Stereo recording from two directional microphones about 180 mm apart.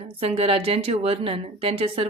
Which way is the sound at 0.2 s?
30° right (ahead or behind).